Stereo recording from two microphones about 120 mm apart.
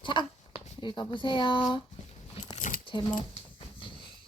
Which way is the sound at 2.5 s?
90° left.